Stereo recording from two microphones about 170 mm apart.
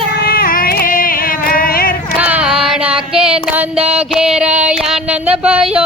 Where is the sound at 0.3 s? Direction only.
60° left (ahead or behind).